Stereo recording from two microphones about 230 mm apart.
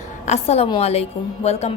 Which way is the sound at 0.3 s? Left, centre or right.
Left.